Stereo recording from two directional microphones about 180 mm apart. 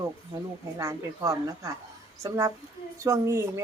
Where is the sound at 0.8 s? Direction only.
15° right (ahead or behind).